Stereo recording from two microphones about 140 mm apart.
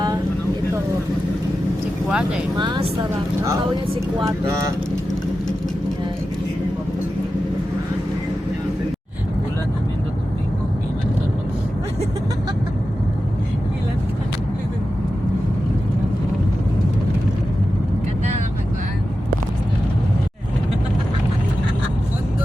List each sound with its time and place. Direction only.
2.0 s speech: 5° right (ahead or behind)
2.6 s speech: 35° right (ahead or behind)